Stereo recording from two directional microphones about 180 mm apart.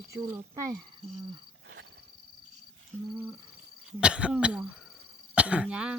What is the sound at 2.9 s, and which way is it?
Speech, 15° right (ahead or behind).